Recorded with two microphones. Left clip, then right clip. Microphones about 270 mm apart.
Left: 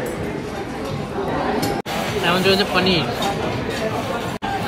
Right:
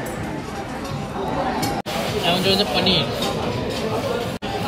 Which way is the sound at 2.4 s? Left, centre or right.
Centre.